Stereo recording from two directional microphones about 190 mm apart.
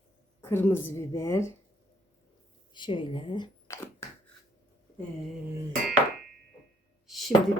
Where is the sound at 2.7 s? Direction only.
25° left (ahead or behind).